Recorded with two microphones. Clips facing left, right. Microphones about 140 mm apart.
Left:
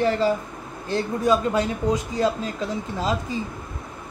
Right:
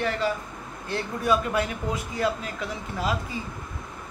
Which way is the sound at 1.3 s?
25° left (ahead or behind).